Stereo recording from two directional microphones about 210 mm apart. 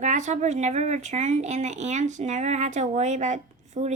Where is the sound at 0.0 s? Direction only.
35° right (ahead or behind).